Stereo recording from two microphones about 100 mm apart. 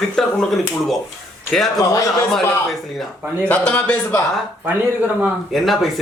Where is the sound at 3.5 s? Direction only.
15° left (ahead or behind).